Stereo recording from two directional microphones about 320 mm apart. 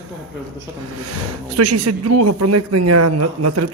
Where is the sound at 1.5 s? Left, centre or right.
Right.